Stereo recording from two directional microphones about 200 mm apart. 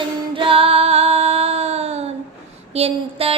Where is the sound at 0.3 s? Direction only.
25° right (ahead or behind).